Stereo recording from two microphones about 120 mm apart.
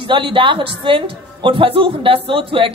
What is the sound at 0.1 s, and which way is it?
Speech, 45° right (ahead or behind).